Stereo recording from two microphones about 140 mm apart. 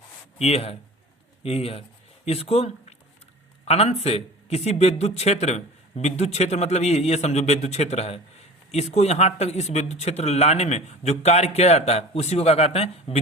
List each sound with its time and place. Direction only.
0.3 s speech: 50° left (ahead or behind)